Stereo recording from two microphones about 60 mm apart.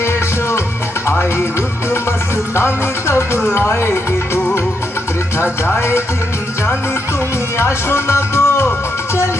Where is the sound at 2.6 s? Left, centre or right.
Left.